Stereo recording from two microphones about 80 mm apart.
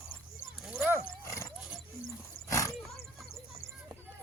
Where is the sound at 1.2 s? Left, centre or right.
Left.